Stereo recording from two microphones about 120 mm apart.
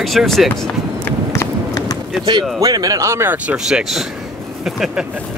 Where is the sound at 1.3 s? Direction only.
25° left (ahead or behind).